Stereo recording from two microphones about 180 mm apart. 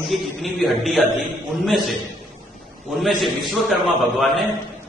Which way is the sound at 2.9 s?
Centre (ahead or behind).